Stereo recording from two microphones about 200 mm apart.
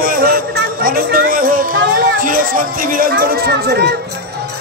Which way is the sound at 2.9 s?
50° right (ahead or behind).